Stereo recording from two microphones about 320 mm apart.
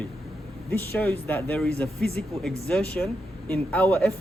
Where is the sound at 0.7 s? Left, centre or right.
Centre.